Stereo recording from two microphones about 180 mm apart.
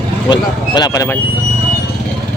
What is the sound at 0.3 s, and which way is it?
Speech, 25° left (ahead or behind).